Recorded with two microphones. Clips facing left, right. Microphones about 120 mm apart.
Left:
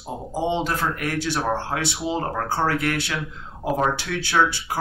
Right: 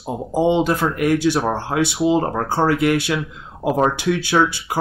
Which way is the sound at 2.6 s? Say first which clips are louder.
Right 8 dB; 20° right (ahead or behind).